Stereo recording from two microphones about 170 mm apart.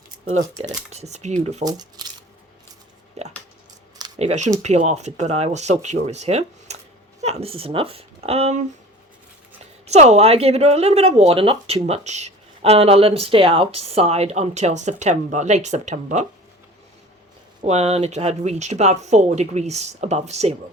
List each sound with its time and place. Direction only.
0.6 s speech: 45° right (ahead or behind)
1.6 s speech: 25° right (ahead or behind)
3.2 s a sound: 40° right (ahead or behind)
4.2 s a woman's voice: 40° right (ahead or behind)
9.8 s speech: 40° right (ahead or behind)
17.6 s speech: 40° right (ahead or behind)